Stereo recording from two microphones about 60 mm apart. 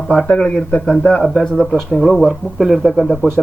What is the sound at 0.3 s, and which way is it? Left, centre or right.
Speech, centre.